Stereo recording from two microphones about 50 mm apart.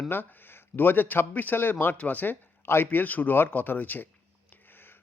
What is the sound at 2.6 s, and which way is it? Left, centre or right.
Speech, left.